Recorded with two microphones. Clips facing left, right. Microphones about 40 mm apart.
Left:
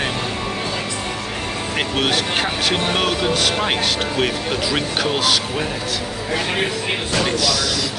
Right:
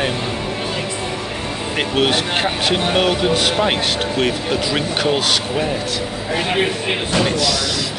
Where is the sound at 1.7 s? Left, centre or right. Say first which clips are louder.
Right 3 dB; centre.